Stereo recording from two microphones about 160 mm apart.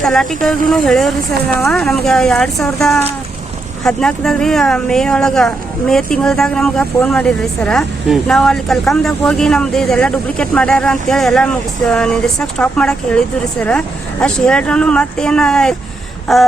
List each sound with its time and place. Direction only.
0.0 s speech: centre (ahead or behind)